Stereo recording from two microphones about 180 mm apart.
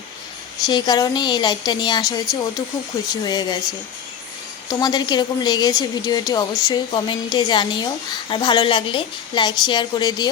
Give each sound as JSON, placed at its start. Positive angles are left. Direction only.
{"t": 0.6, "sound": "a woman's voice", "side_deg": 25}